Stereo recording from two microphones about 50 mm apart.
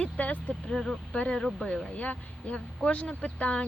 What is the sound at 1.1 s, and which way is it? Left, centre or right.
Speech, left.